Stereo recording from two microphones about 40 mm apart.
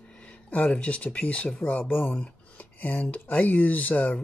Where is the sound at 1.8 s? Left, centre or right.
Left.